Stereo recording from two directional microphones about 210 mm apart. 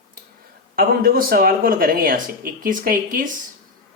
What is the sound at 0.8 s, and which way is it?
Speech, 45° right (ahead or behind).